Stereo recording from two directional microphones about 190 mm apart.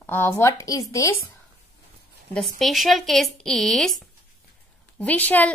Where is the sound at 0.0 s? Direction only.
10° left (ahead or behind).